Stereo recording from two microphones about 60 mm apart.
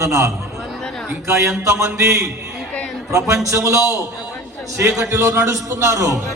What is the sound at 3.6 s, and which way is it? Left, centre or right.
Speech, right.